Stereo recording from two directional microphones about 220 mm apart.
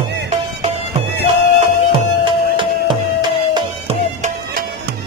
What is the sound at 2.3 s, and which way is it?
Music, 20° right (ahead or behind).